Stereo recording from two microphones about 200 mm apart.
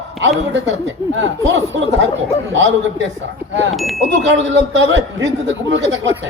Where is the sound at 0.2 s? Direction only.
70° right (ahead or behind).